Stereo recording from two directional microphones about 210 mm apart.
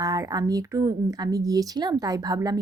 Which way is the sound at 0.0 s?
15° right (ahead or behind).